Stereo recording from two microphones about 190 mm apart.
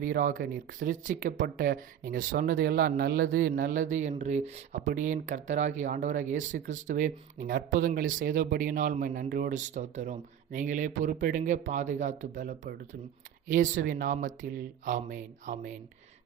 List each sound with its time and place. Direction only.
0.0 s speech: 45° right (ahead or behind)